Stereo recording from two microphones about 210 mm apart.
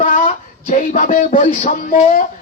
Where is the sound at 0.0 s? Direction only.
40° left (ahead or behind).